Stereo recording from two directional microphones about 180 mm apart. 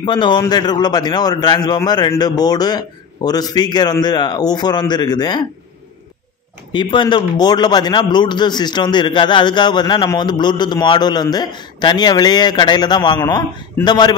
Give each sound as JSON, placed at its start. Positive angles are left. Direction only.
{"t": 0.0, "sound": "a man's voice", "side_deg": 25}
{"t": 6.7, "sound": "a man's voice", "side_deg": 25}